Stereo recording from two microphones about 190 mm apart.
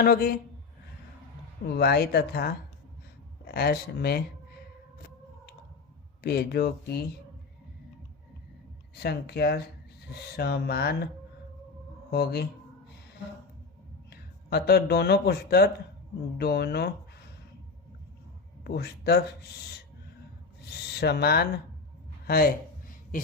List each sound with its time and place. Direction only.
0.0 s speech: 50° left (ahead or behind)
1.7 s speech: 55° left (ahead or behind)
6.2 s speech: 55° left (ahead or behind)
9.0 s speech: 55° left (ahead or behind)
12.1 s speech: 55° left (ahead or behind)
14.1 s speech: 55° left (ahead or behind)
18.6 s speech: 60° left (ahead or behind)
21.0 s speech: 60° left (ahead or behind)